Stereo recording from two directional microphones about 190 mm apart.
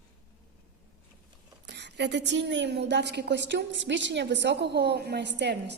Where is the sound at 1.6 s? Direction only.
65° right (ahead or behind).